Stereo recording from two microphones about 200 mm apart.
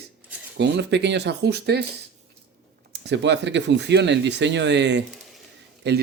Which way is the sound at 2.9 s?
55° right (ahead or behind).